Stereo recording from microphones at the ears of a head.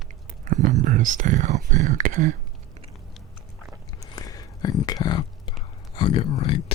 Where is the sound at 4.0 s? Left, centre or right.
Left.